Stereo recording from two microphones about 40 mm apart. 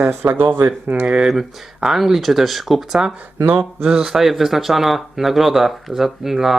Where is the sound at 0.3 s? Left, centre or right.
Right.